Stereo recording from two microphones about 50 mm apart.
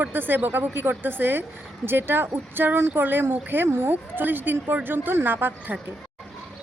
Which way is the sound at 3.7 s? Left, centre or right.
Right.